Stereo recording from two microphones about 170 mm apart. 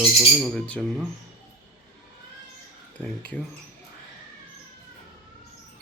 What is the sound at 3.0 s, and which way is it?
Speech, 10° left (ahead or behind).